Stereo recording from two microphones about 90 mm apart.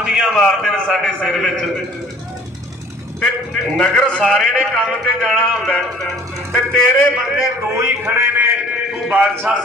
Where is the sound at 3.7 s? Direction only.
10° left (ahead or behind).